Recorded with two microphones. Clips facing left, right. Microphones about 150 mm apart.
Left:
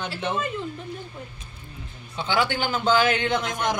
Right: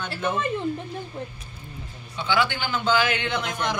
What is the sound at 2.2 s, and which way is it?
A man's voice, 40° left (ahead or behind).